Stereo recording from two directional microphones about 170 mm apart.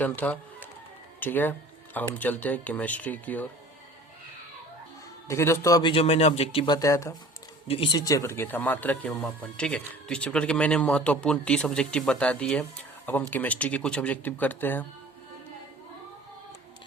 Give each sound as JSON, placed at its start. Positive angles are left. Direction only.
{"t": 0.0, "sound": "speech", "side_deg": 10}
{"t": 5.3, "sound": "a man's voice", "side_deg": 15}
{"t": 5.9, "sound": "a man's voice", "side_deg": 35}
{"t": 6.7, "sound": "a man's voice", "side_deg": 20}
{"t": 7.7, "sound": "speech", "side_deg": 30}